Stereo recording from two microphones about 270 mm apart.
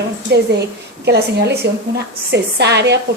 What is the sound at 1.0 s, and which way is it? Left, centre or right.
A woman's voice, right.